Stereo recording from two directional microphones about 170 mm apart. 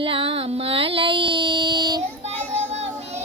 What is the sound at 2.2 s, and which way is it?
Child singing, 40° right (ahead or behind).